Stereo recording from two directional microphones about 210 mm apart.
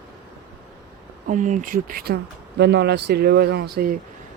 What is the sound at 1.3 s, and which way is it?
Speech, 35° right (ahead or behind).